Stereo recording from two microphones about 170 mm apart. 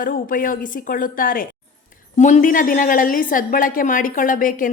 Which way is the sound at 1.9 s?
45° left (ahead or behind).